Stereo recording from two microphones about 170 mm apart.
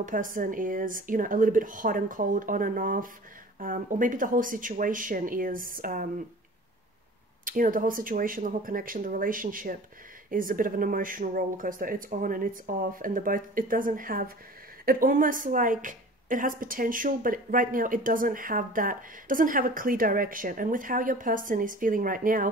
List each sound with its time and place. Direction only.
0.0 s a woman's voice: 50° right (ahead or behind)
7.4 s a woman's voice: 55° right (ahead or behind)